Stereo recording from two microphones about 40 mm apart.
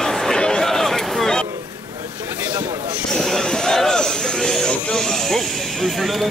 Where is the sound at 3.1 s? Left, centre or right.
Centre.